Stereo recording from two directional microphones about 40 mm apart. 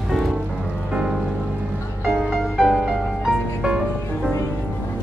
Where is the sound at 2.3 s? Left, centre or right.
Centre.